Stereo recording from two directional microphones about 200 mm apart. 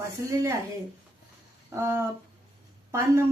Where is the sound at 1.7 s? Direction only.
15° right (ahead or behind).